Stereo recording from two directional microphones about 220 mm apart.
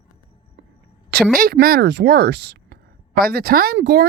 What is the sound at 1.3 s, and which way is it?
Speech, 40° right (ahead or behind).